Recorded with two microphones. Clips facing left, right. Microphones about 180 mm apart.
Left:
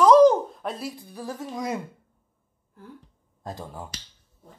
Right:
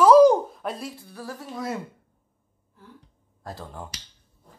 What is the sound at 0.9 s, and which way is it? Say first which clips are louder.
Speech: left 2 dB; 15° left (ahead or behind).